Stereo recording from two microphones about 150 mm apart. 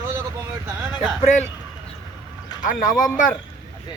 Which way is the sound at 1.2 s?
50° left (ahead or behind).